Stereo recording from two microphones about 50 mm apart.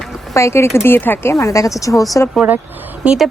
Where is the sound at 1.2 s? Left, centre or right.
Left.